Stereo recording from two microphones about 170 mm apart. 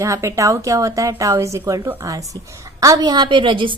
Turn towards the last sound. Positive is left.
turn(degrees=-30)  # may be behind; listen again after turning